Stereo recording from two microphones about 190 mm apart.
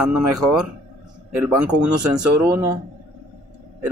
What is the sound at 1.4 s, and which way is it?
Speech, 20° right (ahead or behind).